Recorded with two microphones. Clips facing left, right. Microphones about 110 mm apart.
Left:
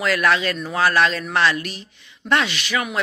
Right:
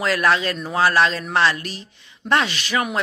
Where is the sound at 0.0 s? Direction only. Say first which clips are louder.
Even; 30° right (ahead or behind).